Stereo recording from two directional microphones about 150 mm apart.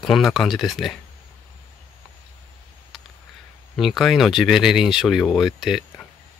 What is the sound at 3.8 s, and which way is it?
Speech, centre (ahead or behind).